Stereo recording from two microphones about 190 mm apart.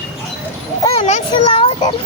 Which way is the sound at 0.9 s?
35° left (ahead or behind).